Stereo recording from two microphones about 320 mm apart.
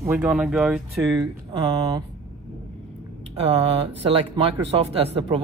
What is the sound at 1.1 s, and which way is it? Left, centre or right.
Speech, centre.